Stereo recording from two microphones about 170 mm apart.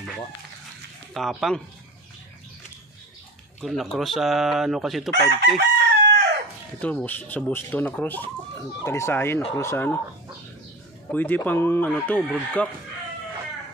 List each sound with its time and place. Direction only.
1.1 s speech: centre (ahead or behind)
3.6 s speech: centre (ahead or behind)
5.6 s chicken: 90° right
6.8 s speech: 10° left (ahead or behind)
11.1 s speech: 10° left (ahead or behind)